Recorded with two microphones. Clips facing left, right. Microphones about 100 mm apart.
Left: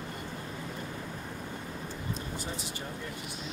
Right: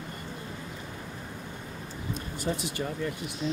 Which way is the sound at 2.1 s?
65° right (ahead or behind).